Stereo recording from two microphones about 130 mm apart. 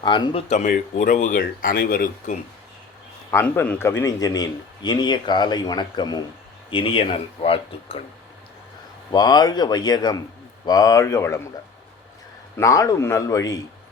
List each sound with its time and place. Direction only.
0.0 s a man's voice: 35° left (ahead or behind)
0.4 s speech: 65° left (ahead or behind)
3.4 s a man's voice: 10° left (ahead or behind); by 6.2 s 30° left (ahead or behind)
6.7 s speech: 40° left (ahead or behind)
9.1 s a man's voice: 30° left (ahead or behind)
12.5 s speech: 25° left (ahead or behind)